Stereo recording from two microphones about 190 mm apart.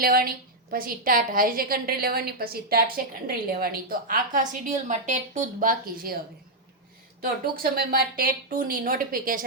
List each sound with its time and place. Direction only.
0.0 s a woman's voice: 50° right (ahead or behind)
7.2 s a woman's voice: 50° right (ahead or behind)